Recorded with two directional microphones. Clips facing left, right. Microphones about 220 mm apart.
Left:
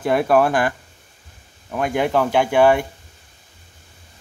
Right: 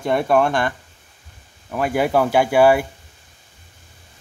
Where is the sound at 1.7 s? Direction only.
5° right (ahead or behind).